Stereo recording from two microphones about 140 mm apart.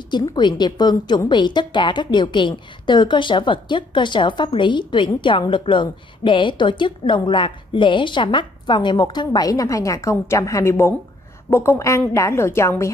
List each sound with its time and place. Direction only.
0.1 s a woman's voice: 30° left (ahead or behind)